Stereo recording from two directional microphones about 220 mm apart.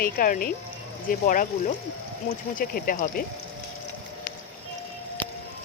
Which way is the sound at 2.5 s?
40° left (ahead or behind).